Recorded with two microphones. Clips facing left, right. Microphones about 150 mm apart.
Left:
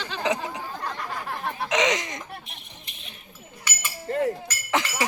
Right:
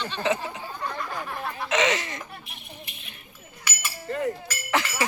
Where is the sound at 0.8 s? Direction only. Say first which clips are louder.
Right 2 dB; 70° left (ahead or behind).